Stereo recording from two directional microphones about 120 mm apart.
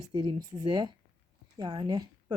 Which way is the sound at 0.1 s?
40° right (ahead or behind).